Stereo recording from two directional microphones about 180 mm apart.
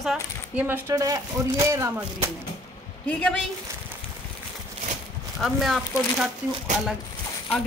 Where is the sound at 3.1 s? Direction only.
5° left (ahead or behind).